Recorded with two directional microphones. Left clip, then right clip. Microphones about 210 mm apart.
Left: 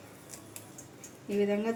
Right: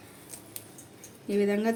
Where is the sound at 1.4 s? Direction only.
50° right (ahead or behind).